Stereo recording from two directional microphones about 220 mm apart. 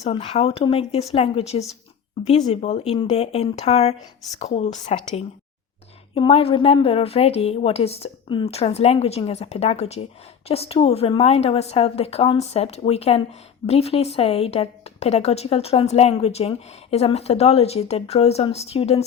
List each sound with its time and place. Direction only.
0.0 s a woman's voice: 25° left (ahead or behind)